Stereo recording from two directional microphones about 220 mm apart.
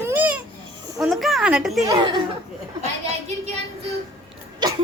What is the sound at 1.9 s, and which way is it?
Speech, 20° right (ahead or behind).